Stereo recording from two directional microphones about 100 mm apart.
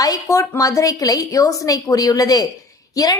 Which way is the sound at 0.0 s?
35° left (ahead or behind).